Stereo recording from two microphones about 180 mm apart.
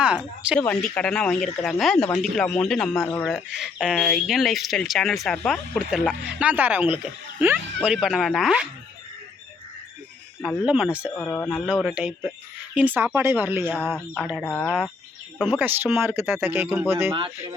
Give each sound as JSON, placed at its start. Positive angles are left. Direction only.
{"t": 0.0, "sound": "speech", "side_deg": -5}
{"t": 0.6, "sound": "speech", "side_deg": 5}
{"t": 10.7, "sound": "speech", "side_deg": -5}
{"t": 11.1, "sound": "speech", "side_deg": 10}
{"t": 15.4, "sound": "speech", "side_deg": -10}
{"t": 17.1, "sound": "speech", "side_deg": -30}